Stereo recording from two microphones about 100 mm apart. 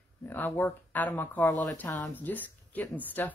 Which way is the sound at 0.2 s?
20° left (ahead or behind).